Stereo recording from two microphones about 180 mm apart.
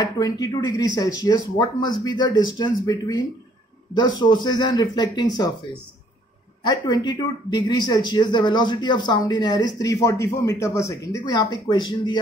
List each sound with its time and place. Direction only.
0.0 s speech: 20° left (ahead or behind)
6.6 s speech: 25° left (ahead or behind)